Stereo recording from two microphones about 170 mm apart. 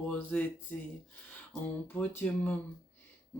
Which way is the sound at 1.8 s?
15° left (ahead or behind).